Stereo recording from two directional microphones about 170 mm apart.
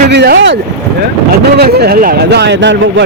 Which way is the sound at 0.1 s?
85° right.